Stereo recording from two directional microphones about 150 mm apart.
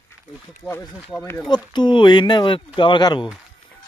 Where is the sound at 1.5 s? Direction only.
30° left (ahead or behind).